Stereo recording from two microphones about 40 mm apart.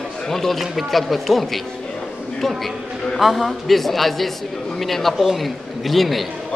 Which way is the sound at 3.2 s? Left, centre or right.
Centre.